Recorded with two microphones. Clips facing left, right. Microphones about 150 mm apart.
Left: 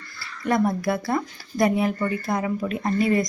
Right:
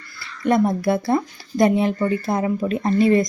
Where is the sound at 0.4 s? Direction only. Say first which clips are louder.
Right 4 dB; 25° right (ahead or behind).